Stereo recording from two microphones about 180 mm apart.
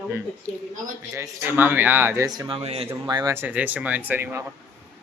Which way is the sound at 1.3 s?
10° right (ahead or behind).